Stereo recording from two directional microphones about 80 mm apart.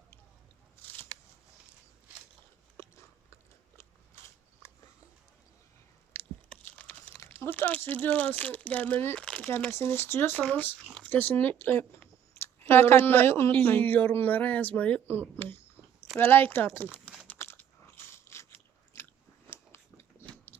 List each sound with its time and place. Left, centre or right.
2.7 s biting: left
6.7 s a sound: centre
7.8 s speech: left
9.1 s speech: centre
9.7 s speech: left
17.3 s biting: left
20.2 s biting: left